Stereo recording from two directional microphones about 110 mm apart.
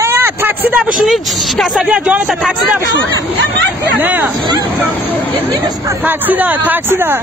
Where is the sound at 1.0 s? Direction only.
Centre (ahead or behind).